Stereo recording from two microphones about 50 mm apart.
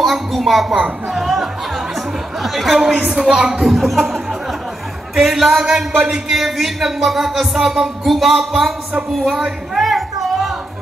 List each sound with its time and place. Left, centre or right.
0.0 s a woman's voice: centre
0.7 s speech: right
1.1 s music: centre
3.1 s a woman's voice: centre
3.6 s speech: centre
5.1 s music: centre
9.2 s a sound: centre